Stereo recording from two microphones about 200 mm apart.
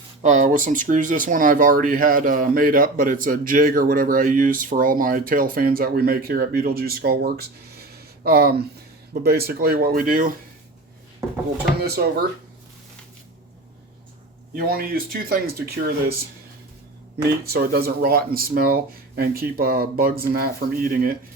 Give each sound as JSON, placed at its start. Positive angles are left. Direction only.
{"t": 0.2, "sound": "speech", "side_deg": -35}
{"t": 11.8, "sound": "speech", "side_deg": -50}
{"t": 14.5, "sound": "speech", "side_deg": -50}
{"t": 17.4, "sound": "speech", "side_deg": -50}